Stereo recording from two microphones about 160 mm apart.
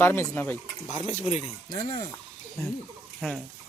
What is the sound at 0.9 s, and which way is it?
Speech, 45° left (ahead or behind).